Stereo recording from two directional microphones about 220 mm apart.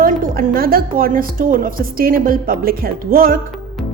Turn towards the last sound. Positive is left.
turn(degrees=-40)  # may be behind; listen again after turning